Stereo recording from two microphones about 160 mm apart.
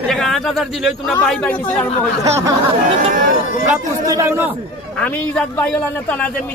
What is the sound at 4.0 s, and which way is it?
Speech, 20° right (ahead or behind).